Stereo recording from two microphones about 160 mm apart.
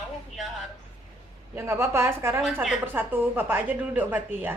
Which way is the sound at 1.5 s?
15° right (ahead or behind).